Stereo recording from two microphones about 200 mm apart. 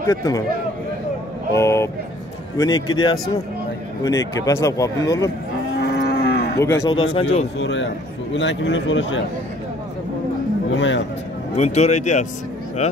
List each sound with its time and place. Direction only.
0.0 s speech: 15° left (ahead or behind)
1.5 s speech: 15° left (ahead or behind)
5.8 s cattle: 55° left (ahead or behind)
6.6 s speech: 15° left (ahead or behind)
7.5 s a man's voice: 65° left (ahead or behind)
10.7 s a man's voice: 65° left (ahead or behind)
11.5 s speech: 35° left (ahead or behind)